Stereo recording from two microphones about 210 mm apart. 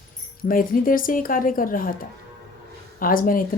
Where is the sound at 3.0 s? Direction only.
40° left (ahead or behind).